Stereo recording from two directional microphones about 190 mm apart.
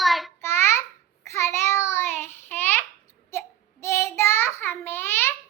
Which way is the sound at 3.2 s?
15° left (ahead or behind).